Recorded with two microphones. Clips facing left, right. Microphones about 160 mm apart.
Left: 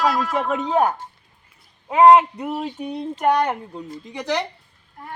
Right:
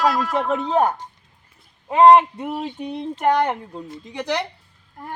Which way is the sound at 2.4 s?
Centre (ahead or behind).